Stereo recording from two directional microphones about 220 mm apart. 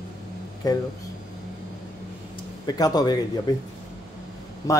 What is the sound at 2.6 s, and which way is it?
Speech, 15° left (ahead or behind).